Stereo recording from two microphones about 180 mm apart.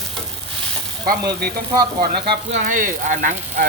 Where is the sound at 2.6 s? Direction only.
45° right (ahead or behind).